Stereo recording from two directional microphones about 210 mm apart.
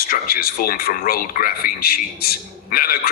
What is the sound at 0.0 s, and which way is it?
A man's voice, 45° left (ahead or behind).